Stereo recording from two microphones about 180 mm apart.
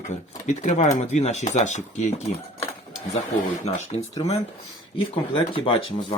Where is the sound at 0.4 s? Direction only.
40° left (ahead or behind).